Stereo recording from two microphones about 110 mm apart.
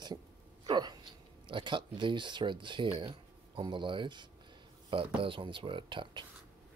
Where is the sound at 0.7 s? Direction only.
40° right (ahead or behind).